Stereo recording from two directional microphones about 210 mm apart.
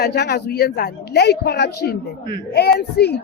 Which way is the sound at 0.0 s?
50° left (ahead or behind).